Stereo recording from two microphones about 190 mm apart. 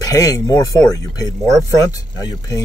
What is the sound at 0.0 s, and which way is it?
Speech, 20° left (ahead or behind).